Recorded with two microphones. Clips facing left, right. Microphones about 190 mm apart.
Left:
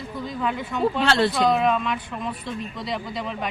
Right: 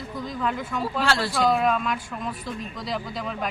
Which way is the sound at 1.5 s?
Centre (ahead or behind).